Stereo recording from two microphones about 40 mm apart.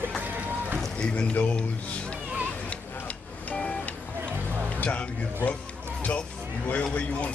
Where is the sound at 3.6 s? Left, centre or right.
Left.